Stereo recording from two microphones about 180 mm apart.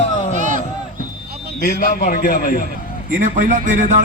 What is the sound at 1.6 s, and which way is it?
A man's voice, 55° left (ahead or behind).